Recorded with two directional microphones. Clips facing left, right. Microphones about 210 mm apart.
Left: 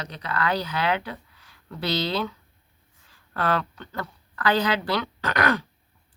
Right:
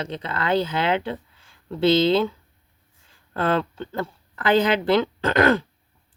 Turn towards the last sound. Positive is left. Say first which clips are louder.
# right 6 dB
turn(degrees=-25)  # may be behind; listen again after turning